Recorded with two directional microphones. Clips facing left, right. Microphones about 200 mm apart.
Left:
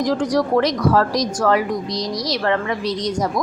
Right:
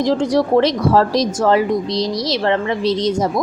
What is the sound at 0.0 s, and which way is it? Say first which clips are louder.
A woman's voice: right 3 dB; 25° right (ahead or behind).